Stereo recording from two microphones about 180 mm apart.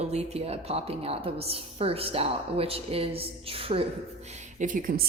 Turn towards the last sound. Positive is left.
turn(degrees=-50)  # may be behind; listen again after turning